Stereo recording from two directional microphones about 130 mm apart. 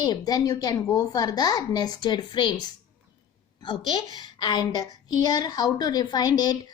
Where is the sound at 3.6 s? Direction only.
35° left (ahead or behind).